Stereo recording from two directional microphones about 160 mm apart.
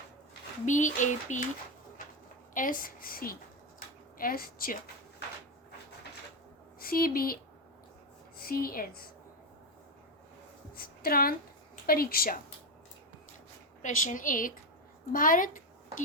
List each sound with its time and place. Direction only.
0.6 s a sound: 50° left (ahead or behind)
2.6 s a woman's voice: 60° left (ahead or behind)
6.7 s a woman's voice: 65° left (ahead or behind)
8.4 s a woman's voice: 65° left (ahead or behind)
10.8 s a woman's voice: 65° left (ahead or behind)
13.8 s a woman's voice: 55° left (ahead or behind)